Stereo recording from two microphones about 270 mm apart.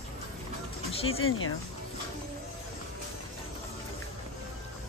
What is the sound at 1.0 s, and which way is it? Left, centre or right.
Speech, left.